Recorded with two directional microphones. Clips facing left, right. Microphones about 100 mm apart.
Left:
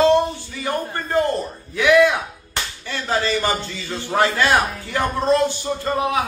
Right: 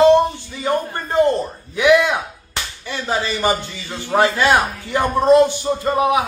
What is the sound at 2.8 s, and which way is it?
A man's voice, 15° right (ahead or behind).